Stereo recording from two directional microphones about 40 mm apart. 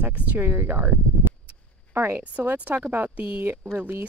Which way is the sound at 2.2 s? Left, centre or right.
Right.